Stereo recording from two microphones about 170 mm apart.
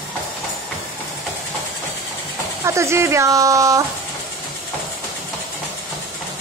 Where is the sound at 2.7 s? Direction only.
15° right (ahead or behind).